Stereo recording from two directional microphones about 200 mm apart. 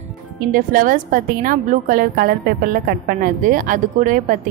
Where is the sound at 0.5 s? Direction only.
45° right (ahead or behind).